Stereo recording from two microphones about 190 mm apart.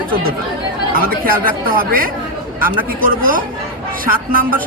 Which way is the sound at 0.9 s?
50° right (ahead or behind).